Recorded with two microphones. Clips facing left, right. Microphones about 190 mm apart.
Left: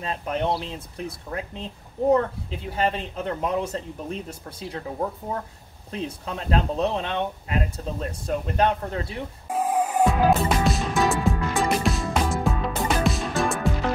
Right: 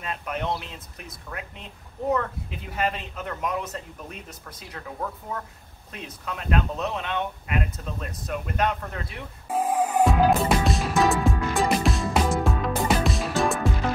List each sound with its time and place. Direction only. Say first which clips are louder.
0.0 s speech: left 4 dB; 30° left (ahead or behind)
10.0 s music: left 1 dB; centre (ahead or behind)